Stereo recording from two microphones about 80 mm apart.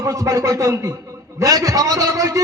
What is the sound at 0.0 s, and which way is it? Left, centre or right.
A man's voice, right.